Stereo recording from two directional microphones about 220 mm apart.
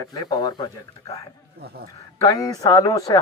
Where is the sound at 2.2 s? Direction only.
15° left (ahead or behind).